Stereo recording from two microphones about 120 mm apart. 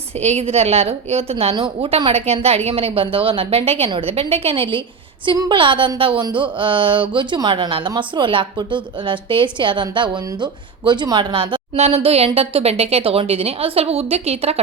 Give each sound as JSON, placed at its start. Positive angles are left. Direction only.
{"t": 0.1, "sound": "a woman's voice", "side_deg": -60}
{"t": 11.8, "sound": "a woman's voice", "side_deg": -60}